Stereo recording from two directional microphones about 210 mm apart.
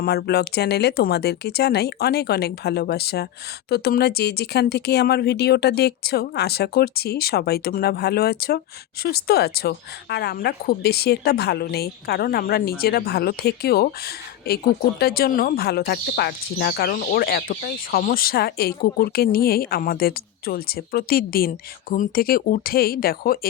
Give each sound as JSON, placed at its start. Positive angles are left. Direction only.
{"t": 0.0, "sound": "speech", "side_deg": 50}